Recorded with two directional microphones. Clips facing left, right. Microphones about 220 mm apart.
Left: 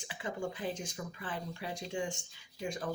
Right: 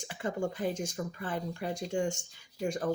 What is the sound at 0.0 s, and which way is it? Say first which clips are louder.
Speech: right 5 dB; 45° right (ahead or behind).